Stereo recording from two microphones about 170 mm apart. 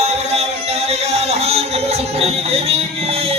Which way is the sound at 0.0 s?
40° right (ahead or behind).